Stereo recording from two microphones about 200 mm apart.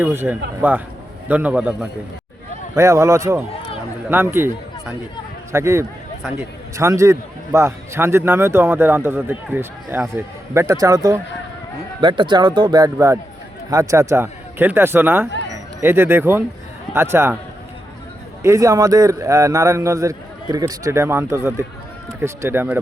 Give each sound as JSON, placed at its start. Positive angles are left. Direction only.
{"t": 0.0, "sound": "speech", "side_deg": -10}
{"t": 18.4, "sound": "speech", "side_deg": -15}